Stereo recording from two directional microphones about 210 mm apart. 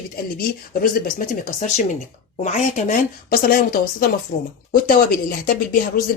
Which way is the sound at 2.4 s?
35° left (ahead or behind).